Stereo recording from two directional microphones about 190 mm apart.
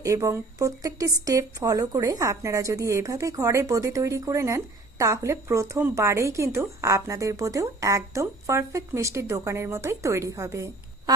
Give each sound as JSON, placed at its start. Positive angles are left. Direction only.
{"t": 0.0, "sound": "a woman's voice", "side_deg": -15}